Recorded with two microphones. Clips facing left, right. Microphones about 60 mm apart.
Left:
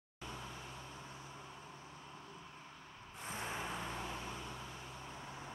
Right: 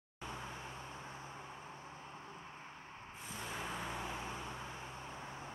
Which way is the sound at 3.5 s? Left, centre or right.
Centre.